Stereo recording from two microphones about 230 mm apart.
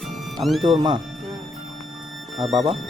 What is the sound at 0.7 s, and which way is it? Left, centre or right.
Speech, right.